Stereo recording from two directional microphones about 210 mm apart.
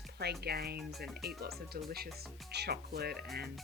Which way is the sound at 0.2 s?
50° right (ahead or behind).